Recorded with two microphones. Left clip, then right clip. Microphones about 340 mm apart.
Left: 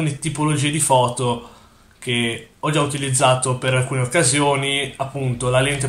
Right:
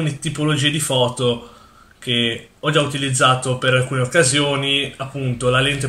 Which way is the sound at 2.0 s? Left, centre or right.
Centre.